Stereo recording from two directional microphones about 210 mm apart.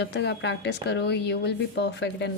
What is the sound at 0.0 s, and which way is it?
A woman's voice, 55° left (ahead or behind).